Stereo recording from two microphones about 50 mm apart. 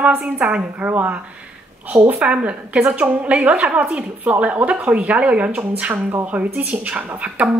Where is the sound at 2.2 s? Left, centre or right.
Right.